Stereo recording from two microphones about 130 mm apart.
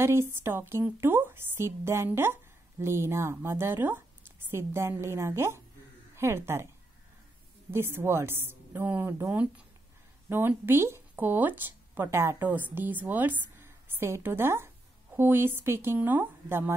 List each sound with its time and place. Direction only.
0.0 s a woman's voice: 20° right (ahead or behind)
7.7 s a woman's voice: 20° right (ahead or behind)